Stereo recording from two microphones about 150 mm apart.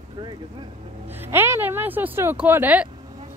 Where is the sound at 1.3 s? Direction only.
15° right (ahead or behind).